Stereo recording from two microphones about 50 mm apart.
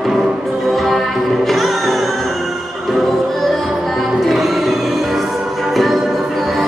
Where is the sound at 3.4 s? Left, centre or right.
Centre.